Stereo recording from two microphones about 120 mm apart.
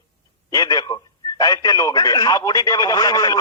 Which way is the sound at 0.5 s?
30° left (ahead or behind).